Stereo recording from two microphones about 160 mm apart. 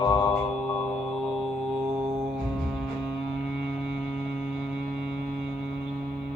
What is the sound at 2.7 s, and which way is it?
Music, centre (ahead or behind).